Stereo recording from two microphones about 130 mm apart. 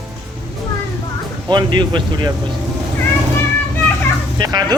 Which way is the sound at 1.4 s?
35° right (ahead or behind).